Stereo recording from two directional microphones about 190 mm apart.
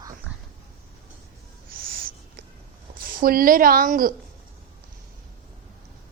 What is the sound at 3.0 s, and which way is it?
A woman's voice, 50° right (ahead or behind).